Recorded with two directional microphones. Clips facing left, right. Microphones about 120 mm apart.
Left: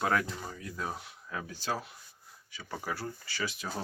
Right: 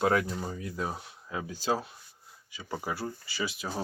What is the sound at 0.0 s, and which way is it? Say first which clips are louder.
Speech: right 4 dB; 25° right (ahead or behind).